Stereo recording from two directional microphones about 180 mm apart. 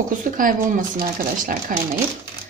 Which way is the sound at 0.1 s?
45° right (ahead or behind).